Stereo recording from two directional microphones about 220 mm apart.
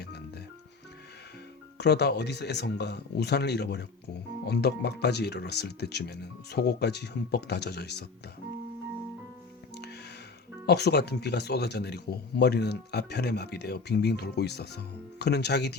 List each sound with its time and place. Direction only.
0.0 s music: 50° left (ahead or behind)
1.8 s speech: 50° left (ahead or behind)
9.7 s music: 50° left (ahead or behind)
10.7 s speech: 50° left (ahead or behind)